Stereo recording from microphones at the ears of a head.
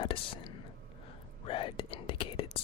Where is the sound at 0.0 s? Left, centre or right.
Left.